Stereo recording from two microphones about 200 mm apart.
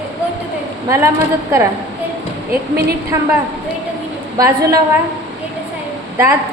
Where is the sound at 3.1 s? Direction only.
15° right (ahead or behind).